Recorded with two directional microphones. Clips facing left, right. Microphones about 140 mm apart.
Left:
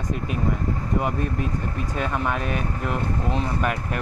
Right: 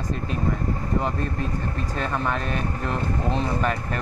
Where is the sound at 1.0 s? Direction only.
10° left (ahead or behind).